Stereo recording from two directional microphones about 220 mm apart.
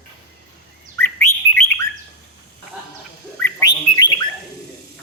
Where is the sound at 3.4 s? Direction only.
15° left (ahead or behind).